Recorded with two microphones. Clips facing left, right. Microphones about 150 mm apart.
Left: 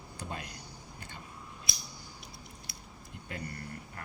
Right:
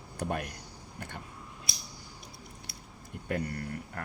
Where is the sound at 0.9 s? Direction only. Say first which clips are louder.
Right 8 dB; 65° right (ahead or behind).